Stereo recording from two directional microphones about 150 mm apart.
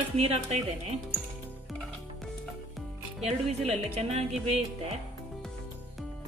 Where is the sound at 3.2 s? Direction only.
45° right (ahead or behind).